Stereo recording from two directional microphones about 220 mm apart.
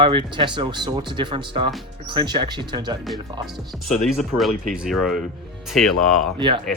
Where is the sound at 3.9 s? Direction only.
Centre (ahead or behind).